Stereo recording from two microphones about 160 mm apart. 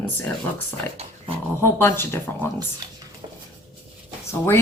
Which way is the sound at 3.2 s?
30° right (ahead or behind).